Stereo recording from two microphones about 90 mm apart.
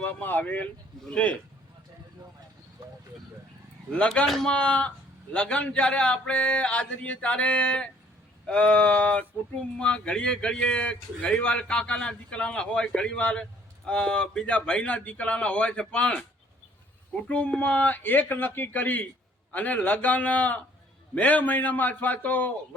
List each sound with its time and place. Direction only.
0.0 s a man's voice: 20° left (ahead or behind)
3.9 s a man's voice: 15° left (ahead or behind)
4.3 s speech: 5° left (ahead or behind)
4.5 s a man's voice: 15° left (ahead or behind)
17.2 s a man's voice: 15° left (ahead or behind)